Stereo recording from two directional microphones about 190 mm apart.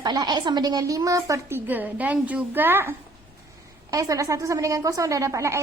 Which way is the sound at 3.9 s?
15° right (ahead or behind).